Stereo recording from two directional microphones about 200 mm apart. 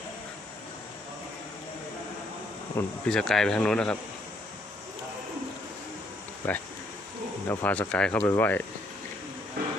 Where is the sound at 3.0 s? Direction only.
Centre (ahead or behind).